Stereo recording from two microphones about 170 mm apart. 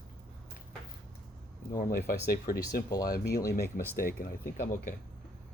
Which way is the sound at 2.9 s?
20° left (ahead or behind).